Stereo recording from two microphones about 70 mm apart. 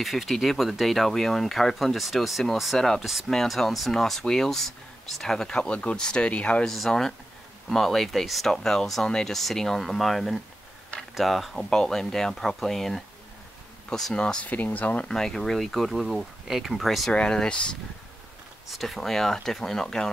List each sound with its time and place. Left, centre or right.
0.0 s speech: centre
6.7 s speech: centre
14.5 s speech: left
15.0 s speech: centre
17.1 s speech: centre
18.7 s speech: centre